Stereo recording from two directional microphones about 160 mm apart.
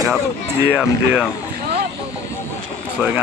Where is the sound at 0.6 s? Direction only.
5° right (ahead or behind).